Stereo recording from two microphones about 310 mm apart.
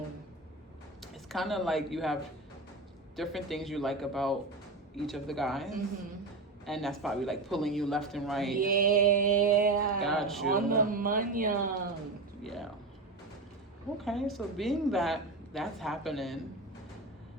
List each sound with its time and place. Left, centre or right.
1.0 s speech: centre
3.2 s a woman's voice: centre
8.8 s music: right
10.0 s a woman's voice: centre
10.5 s music: right
12.4 s a sound: centre
14.0 s a woman's voice: centre